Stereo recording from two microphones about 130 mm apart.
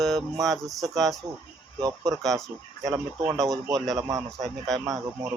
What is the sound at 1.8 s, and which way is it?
Speech, 25° right (ahead or behind).